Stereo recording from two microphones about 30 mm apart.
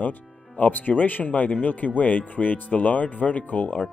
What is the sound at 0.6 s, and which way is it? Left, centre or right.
Speech, left.